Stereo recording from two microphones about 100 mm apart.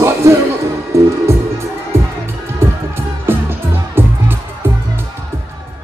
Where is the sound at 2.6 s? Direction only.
25° right (ahead or behind).